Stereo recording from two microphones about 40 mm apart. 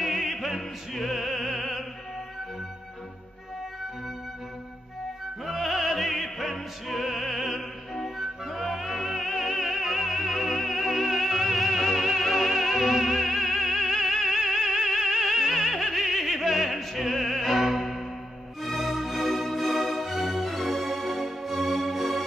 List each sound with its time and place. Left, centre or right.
0.0 s opera: centre
5.4 s opera: centre
8.2 s music: centre
16.0 s opera: centre
18.6 s music: centre